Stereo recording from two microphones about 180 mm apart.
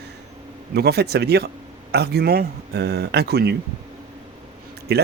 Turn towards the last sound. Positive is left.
turn(degrees=-65)  # may be behind; listen again after turning